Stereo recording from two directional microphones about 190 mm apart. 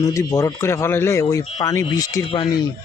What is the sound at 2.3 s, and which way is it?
Speech, 25° left (ahead or behind).